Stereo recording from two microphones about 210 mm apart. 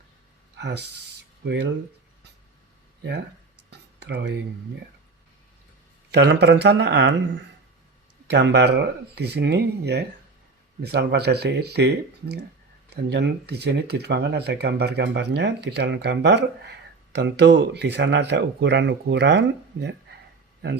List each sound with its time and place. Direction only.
0.6 s speech: 50° right (ahead or behind)
3.7 s a sound: 55° right (ahead or behind)
6.1 s speech: 55° right (ahead or behind)
8.3 s speech: 55° right (ahead or behind)